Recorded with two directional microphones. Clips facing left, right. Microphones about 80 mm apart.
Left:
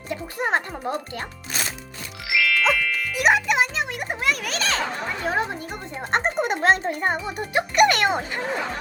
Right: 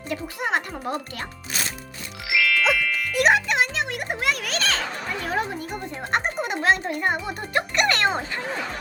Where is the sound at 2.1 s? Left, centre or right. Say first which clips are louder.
Even; centre.